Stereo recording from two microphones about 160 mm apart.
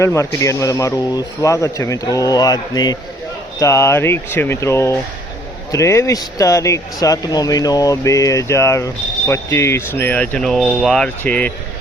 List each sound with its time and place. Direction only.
0.0 s speech: 20° left (ahead or behind)